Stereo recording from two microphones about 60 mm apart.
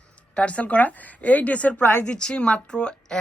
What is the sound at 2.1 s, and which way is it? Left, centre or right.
Speech, centre.